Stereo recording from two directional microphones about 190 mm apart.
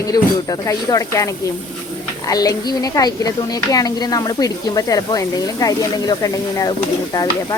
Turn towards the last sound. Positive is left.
turn(degrees=20)  # may be behind; listen again after turning